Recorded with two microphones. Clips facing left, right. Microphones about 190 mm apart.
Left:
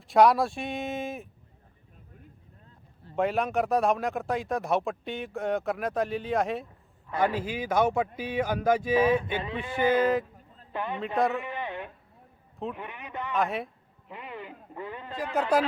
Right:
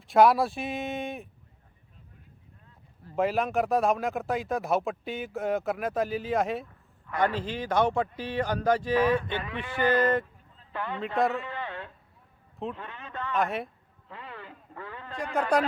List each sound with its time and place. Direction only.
0.1 s speech: centre (ahead or behind)
3.2 s a man's voice: centre (ahead or behind)
10.7 s a man's voice: 15° left (ahead or behind)
11.3 s a sound: 15° left (ahead or behind)
12.7 s a man's voice: 15° left (ahead or behind)
13.3 s speech: centre (ahead or behind)
14.1 s a sound: 15° left (ahead or behind)
15.4 s speech: 5° left (ahead or behind)